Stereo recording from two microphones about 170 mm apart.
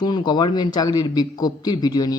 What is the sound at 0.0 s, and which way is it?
A man's voice, 25° left (ahead or behind).